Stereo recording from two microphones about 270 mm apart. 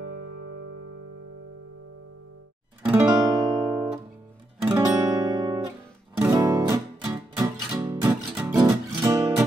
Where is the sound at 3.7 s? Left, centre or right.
Centre.